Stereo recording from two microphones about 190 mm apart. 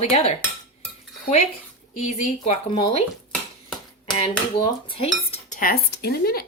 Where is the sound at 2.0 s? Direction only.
35° left (ahead or behind).